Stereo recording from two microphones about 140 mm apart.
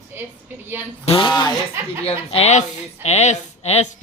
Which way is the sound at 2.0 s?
45° left (ahead or behind).